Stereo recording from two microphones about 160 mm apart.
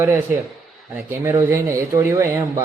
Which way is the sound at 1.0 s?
15° right (ahead or behind).